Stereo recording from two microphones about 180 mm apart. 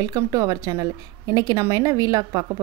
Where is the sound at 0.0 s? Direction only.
20° right (ahead or behind).